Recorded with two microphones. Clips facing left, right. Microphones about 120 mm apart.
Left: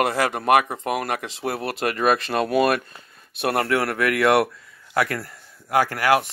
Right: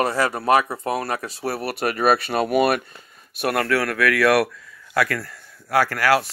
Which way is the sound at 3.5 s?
25° left (ahead or behind).